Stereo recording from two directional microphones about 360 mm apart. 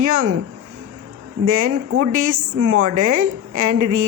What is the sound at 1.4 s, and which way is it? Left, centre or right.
Speech, right.